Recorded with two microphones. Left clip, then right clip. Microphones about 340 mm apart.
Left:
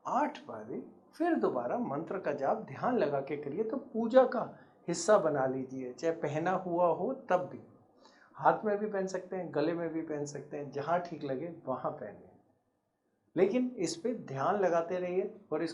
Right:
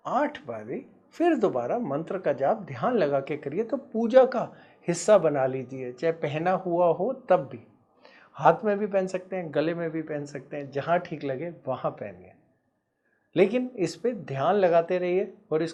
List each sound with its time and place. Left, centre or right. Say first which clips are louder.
0.0 s speech: right 5 dB; right
13.3 s speech: right 6 dB; right